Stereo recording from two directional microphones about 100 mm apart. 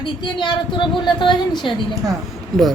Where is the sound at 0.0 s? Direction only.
50° left (ahead or behind).